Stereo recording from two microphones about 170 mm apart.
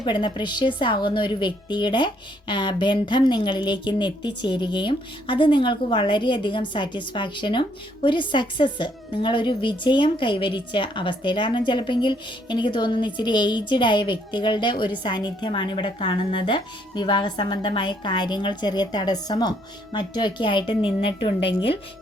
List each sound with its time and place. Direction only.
0.0 s speech: 30° left (ahead or behind)